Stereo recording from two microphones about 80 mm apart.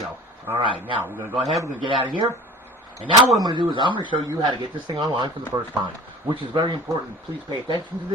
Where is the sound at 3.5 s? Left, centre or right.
Right.